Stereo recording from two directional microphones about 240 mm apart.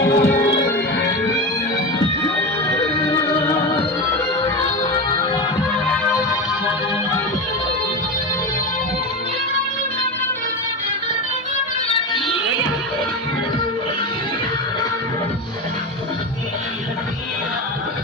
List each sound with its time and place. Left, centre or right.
0.0 s music: left
2.2 s music: centre
5.9 s music: centre